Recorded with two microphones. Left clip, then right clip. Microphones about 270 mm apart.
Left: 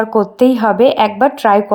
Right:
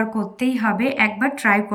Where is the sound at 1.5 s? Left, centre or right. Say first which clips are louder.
Left 5 dB; centre.